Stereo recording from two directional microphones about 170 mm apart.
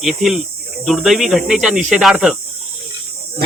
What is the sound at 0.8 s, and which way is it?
Speech, centre (ahead or behind).